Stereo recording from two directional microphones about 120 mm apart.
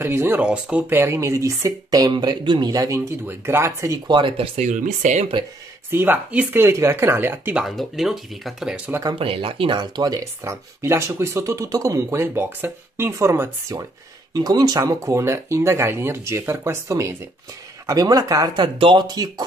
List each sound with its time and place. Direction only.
0.0 s speech: 20° right (ahead or behind)
0.4 s speech: 10° right (ahead or behind); by 4.0 s 25° right (ahead or behind)
4.1 s speech: 45° right (ahead or behind)
4.6 s speech: 80° right
5.9 s speech: 20° right (ahead or behind)
7.5 s speech: centre (ahead or behind)
9.1 s speech: 45° right (ahead or behind)